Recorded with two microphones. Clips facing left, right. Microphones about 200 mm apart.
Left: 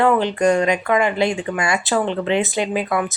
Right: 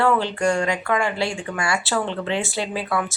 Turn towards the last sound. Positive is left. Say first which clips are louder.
# left 4 dB
turn(degrees=20)  # may be behind; listen again after turning